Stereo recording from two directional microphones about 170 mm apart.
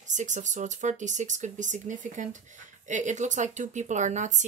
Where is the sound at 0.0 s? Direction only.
45° right (ahead or behind).